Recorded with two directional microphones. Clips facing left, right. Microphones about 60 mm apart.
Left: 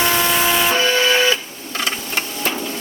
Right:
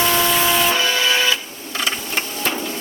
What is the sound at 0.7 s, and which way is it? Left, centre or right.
Printer, left.